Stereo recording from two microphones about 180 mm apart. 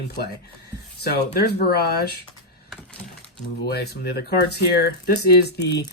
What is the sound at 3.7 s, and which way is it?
Speech, 65° left (ahead or behind).